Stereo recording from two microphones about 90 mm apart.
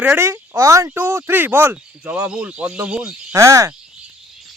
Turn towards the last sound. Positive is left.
turn(degrees=-30)  # may be behind; listen again after turning